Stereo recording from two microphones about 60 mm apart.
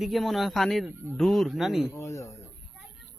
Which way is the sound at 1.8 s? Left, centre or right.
Left.